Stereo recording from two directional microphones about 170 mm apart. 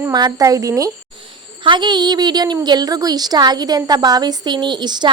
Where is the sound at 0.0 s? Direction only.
20° right (ahead or behind).